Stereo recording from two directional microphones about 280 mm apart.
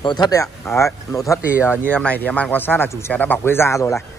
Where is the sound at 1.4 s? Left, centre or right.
Centre.